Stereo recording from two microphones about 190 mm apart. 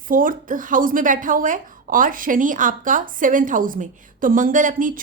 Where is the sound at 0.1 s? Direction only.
45° right (ahead or behind).